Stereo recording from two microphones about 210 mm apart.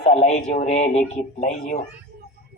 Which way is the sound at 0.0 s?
30° left (ahead or behind).